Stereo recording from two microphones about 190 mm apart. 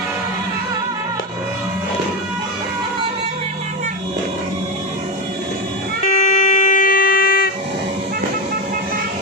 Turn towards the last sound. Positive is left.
turn(degrees=50)  # may be behind; listen again after turning